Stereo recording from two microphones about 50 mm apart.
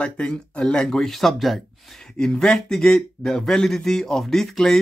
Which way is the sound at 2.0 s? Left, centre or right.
Centre.